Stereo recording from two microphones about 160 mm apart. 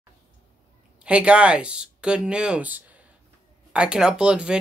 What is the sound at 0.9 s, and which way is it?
Speech, 5° right (ahead or behind).